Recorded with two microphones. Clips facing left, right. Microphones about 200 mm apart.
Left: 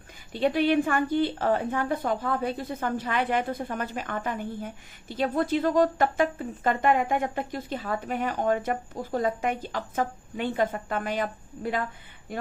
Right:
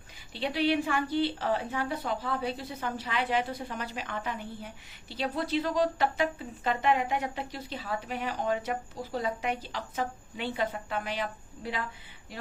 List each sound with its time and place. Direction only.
0.3 s a woman's voice: 50° left (ahead or behind)